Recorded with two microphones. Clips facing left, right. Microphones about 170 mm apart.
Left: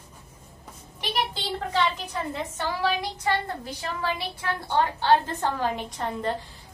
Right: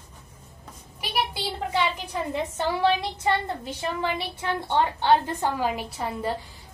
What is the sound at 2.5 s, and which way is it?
Child singing, 25° right (ahead or behind).